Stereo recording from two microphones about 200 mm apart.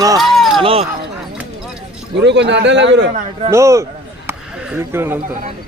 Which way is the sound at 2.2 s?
60° right (ahead or behind).